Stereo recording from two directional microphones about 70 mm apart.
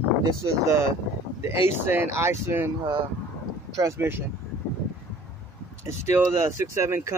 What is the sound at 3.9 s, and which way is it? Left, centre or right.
Speech, right.